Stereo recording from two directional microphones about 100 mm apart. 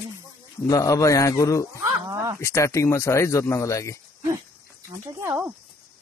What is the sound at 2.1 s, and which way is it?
Speech, 30° right (ahead or behind).